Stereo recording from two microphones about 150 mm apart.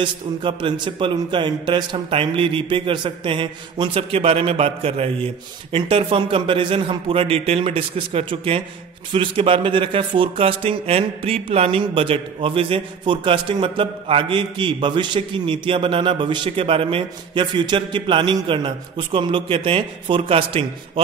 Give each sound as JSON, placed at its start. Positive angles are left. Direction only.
{"t": 0.0, "sound": "speech", "side_deg": -35}